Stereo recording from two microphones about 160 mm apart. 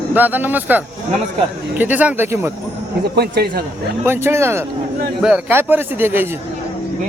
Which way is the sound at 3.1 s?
85° right.